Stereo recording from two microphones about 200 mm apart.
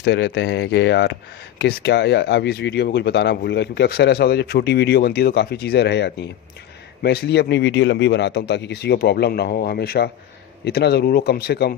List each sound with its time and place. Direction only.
0.0 s speech: 60° left (ahead or behind)